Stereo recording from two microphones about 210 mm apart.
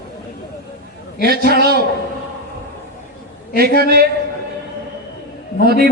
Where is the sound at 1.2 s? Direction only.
45° right (ahead or behind).